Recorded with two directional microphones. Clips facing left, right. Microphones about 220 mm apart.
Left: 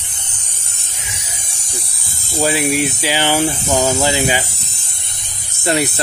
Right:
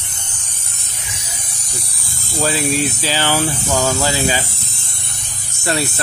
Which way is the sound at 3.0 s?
15° left (ahead or behind).